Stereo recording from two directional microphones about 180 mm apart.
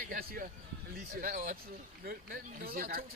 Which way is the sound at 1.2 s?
50° right (ahead or behind).